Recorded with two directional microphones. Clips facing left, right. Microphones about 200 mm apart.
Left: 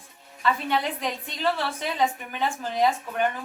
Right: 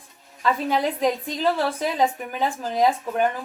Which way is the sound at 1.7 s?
35° right (ahead or behind).